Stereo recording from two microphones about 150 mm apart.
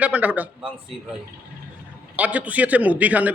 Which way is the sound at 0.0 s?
10° right (ahead or behind).